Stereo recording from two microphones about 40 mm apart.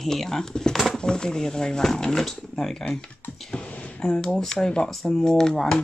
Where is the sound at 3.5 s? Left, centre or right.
Left.